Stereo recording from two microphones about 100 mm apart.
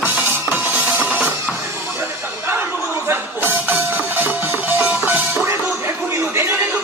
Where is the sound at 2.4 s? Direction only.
20° right (ahead or behind).